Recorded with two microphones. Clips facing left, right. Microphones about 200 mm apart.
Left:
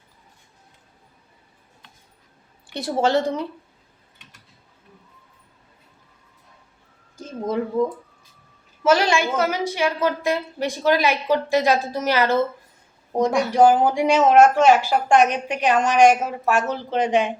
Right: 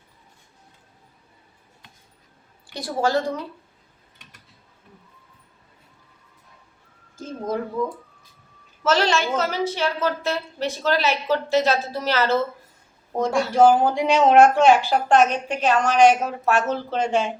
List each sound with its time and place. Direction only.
2.7 s a woman's voice: 25° left (ahead or behind)
8.8 s speech: 10° left (ahead or behind)